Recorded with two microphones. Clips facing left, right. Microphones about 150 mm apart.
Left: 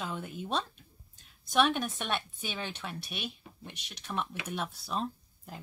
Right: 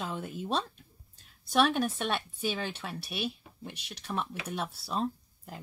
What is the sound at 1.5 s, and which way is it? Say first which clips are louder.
A woman's voice: right 2 dB; 5° right (ahead or behind).